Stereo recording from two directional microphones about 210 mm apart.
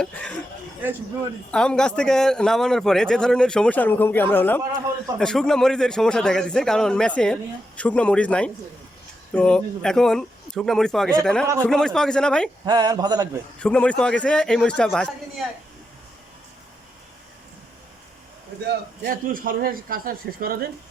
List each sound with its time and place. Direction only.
0.0 s speech: 5° left (ahead or behind)
1.5 s a man's voice: 5° left (ahead or behind)
12.6 s speech: 20° right (ahead or behind)
13.6 s a man's voice: 5° left (ahead or behind)
18.6 s a man's voice: 45° right (ahead or behind)